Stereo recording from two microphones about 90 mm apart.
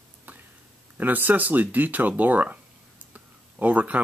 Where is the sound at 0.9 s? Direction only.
20° right (ahead or behind).